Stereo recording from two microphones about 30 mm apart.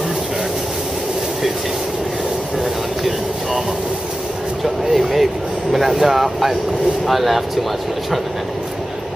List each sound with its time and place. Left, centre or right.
3.0 s vehicle: centre
4.9 s speech: centre